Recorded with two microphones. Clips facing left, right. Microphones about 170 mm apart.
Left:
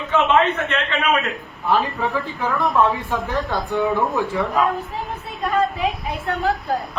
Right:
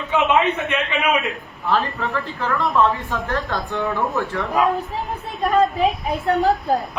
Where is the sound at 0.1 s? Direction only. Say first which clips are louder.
Left 1 dB; 15° right (ahead or behind).